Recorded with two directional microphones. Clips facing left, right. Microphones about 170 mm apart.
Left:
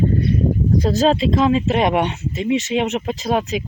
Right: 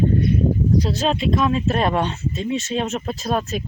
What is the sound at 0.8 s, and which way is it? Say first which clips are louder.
Speech: left 6 dB; 40° left (ahead or behind).